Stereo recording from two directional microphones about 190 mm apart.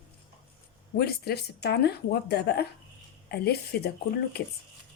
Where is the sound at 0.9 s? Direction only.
55° left (ahead or behind).